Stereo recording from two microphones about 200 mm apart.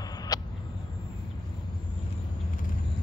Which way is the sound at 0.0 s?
20° left (ahead or behind).